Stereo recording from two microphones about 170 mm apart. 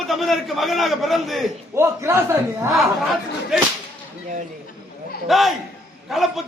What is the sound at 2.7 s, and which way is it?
Speech, centre (ahead or behind).